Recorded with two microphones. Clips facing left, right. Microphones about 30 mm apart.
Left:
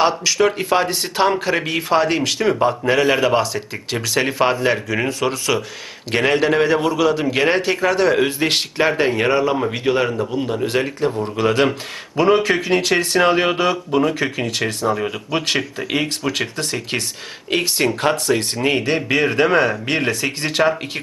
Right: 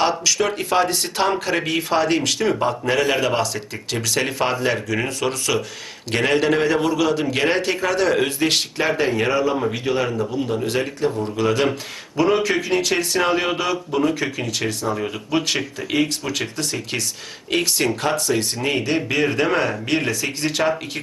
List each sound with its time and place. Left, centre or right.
0.0 s a man's voice: centre
9.3 s a man's voice: left
10.4 s a man's voice: centre